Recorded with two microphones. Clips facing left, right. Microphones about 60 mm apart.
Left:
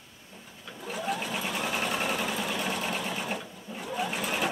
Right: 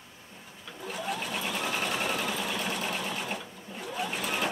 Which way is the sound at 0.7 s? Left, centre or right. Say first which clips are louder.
Left 2 dB; centre.